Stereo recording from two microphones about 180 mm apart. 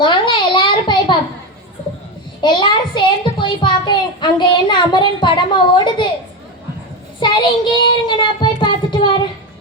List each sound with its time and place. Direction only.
0.0 s a sound: 25° left (ahead or behind)
2.4 s a child's voice: 25° left (ahead or behind)
7.2 s child singing: 25° left (ahead or behind)